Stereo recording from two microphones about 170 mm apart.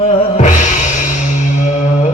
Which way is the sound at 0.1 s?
50° left (ahead or behind).